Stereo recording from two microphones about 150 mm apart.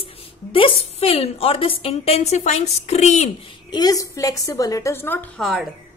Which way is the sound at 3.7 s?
25° left (ahead or behind).